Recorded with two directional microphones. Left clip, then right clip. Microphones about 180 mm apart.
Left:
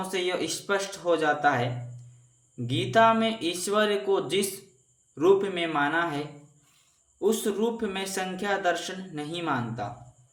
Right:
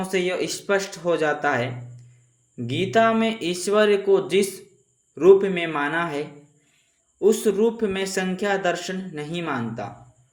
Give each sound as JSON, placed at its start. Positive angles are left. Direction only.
{"t": 0.0, "sound": "speech", "side_deg": -20}